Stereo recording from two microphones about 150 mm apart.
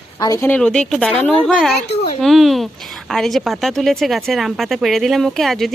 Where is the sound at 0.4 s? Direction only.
10° left (ahead or behind).